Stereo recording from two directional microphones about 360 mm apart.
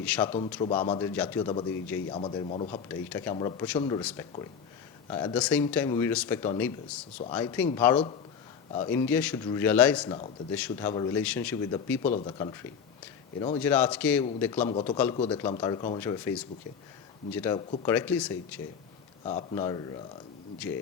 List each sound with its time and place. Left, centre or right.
0.0 s speech: centre
0.3 s speech: centre
14.7 s speech: centre
19.2 s speech: centre